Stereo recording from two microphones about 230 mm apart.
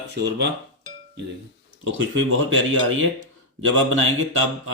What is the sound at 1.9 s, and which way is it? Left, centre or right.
Speech, right.